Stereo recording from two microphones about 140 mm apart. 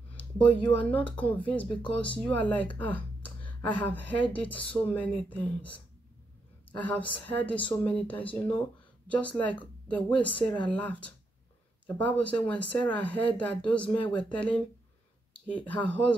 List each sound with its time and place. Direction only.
0.4 s speech: 10° left (ahead or behind)
6.8 s speech: 10° left (ahead or behind)
10.3 s speech: 35° left (ahead or behind)
10.7 s speech: 10° left (ahead or behind)